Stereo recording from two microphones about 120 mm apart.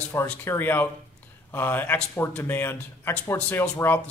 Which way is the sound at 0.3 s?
15° left (ahead or behind).